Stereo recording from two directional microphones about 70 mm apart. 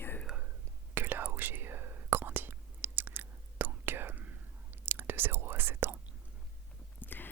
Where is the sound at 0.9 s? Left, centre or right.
Right.